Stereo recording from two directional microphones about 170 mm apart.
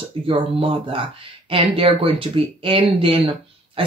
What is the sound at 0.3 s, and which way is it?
Speech, 30° right (ahead or behind).